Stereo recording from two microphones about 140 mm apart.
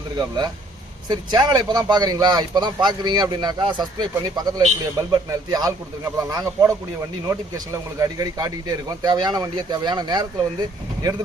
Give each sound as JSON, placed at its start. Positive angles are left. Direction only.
{"t": 0.2, "sound": "speech", "side_deg": -30}